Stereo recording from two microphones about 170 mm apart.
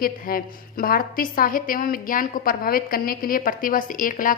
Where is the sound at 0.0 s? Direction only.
60° left (ahead or behind).